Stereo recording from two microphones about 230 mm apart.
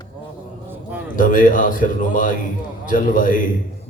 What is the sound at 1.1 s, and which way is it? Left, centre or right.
A man's voice, left.